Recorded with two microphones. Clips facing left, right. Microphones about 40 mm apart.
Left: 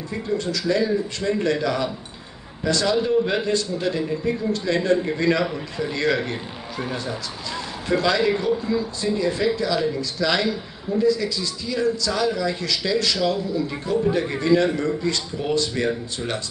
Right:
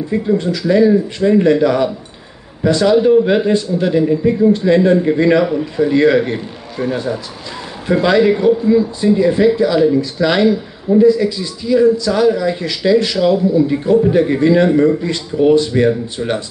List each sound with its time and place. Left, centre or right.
0.4 s a man's voice: right